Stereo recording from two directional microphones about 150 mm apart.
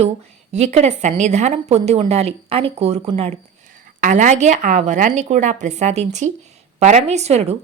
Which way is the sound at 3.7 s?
60° right (ahead or behind).